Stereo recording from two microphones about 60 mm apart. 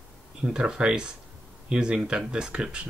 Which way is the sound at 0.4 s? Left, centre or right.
Centre.